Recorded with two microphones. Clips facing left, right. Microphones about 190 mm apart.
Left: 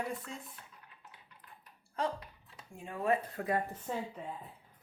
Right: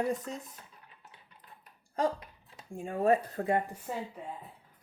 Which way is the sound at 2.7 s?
45° right (ahead or behind).